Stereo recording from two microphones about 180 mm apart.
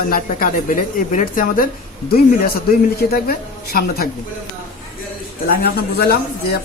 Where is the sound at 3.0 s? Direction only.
60° left (ahead or behind).